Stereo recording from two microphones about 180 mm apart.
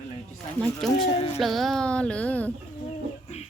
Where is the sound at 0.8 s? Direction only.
Centre (ahead or behind).